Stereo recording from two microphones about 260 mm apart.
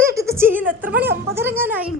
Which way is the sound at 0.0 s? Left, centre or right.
Centre.